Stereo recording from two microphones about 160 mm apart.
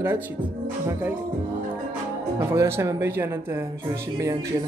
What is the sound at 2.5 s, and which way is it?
Speech, 15° right (ahead or behind).